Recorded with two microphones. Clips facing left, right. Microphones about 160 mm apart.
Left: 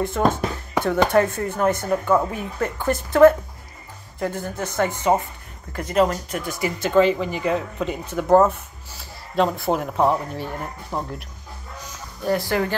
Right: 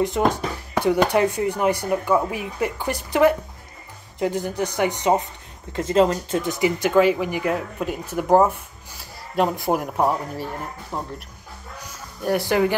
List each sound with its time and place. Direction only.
0.0 s speech: 15° right (ahead or behind)
12.3 s speech: 15° right (ahead or behind)